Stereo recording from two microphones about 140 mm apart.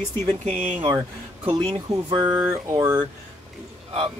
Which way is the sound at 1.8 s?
30° right (ahead or behind).